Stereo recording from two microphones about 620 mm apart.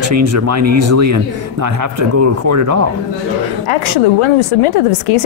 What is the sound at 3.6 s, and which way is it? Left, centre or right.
A woman's voice, left.